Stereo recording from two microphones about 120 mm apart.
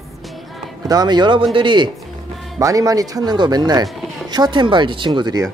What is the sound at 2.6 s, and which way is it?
Speech, 30° right (ahead or behind).